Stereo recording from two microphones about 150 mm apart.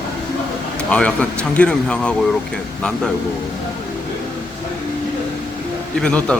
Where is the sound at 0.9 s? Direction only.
5° left (ahead or behind).